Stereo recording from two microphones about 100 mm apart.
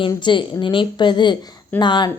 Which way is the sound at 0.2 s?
55° left (ahead or behind).